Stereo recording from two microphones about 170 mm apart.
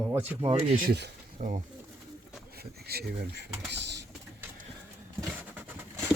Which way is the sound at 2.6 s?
65° right (ahead or behind).